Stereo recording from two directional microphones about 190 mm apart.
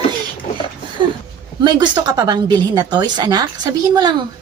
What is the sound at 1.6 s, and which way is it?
Speech, 25° right (ahead or behind).